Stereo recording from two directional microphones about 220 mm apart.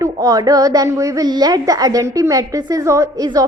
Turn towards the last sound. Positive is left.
turn(degrees=-15)  # may be behind; listen again after turning